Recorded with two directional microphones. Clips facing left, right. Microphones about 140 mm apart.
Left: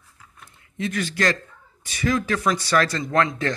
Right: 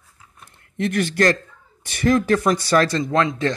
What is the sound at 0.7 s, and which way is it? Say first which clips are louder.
Speech: right 5 dB; 60° right (ahead or behind).